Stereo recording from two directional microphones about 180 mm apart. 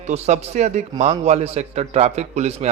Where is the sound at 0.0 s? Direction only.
40° right (ahead or behind).